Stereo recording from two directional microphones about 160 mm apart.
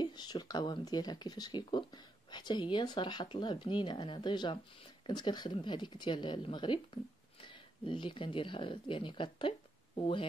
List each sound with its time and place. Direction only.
0.0 s a woman's voice: 25° left (ahead or behind)